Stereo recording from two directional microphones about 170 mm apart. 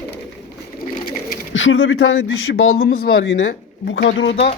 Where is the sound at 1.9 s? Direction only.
90° left.